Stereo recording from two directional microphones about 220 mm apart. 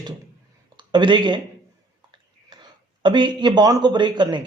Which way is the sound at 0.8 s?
20° right (ahead or behind).